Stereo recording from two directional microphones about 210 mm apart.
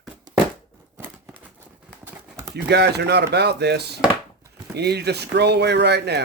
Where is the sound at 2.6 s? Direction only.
50° right (ahead or behind).